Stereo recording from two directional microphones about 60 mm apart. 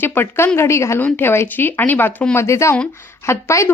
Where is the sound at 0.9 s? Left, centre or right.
Left.